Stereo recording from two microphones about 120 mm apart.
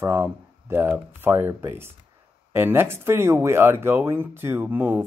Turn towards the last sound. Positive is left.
turn(degrees=-15)  # may be behind; listen again after turning